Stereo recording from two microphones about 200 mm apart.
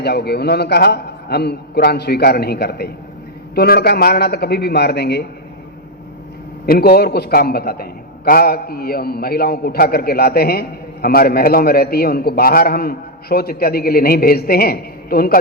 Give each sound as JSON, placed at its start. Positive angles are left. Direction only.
{"t": 0.0, "sound": "a man's voice", "side_deg": 55}
{"t": 6.7, "sound": "a man's voice", "side_deg": 50}